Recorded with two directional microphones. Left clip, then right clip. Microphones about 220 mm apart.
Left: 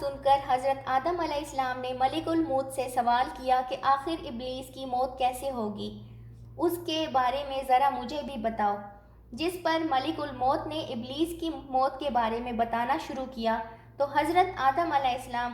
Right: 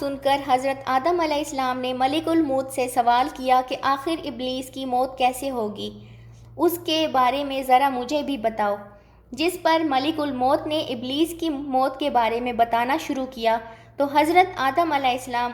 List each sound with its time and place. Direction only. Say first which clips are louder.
0.0 s a woman's voice: right 3 dB; 25° right (ahead or behind)
9.6 s a woman's voice: right 7 dB; 25° right (ahead or behind)